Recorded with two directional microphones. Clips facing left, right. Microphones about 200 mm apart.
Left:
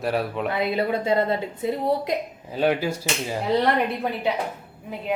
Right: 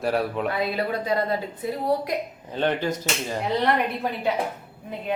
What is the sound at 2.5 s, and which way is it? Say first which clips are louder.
Speech: left 2 dB; 10° left (ahead or behind).